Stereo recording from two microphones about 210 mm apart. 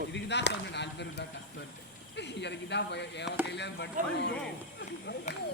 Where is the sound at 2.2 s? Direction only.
55° left (ahead or behind).